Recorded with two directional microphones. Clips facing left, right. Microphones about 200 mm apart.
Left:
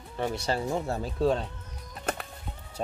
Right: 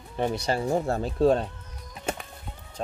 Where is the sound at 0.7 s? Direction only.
45° right (ahead or behind).